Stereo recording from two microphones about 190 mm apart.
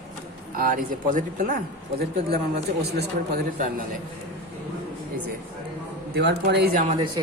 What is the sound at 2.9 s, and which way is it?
Speech, 55° right (ahead or behind).